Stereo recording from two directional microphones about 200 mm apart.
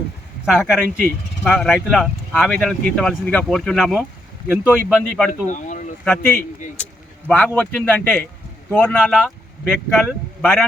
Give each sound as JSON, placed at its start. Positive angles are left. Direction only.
{"t": 0.4, "sound": "speech", "side_deg": -5}
{"t": 5.3, "sound": "speech", "side_deg": 40}
{"t": 6.1, "sound": "a man's voice", "side_deg": 10}